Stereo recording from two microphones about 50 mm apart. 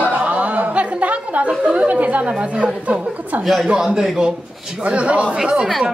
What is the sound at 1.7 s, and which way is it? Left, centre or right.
A woman's voice, right.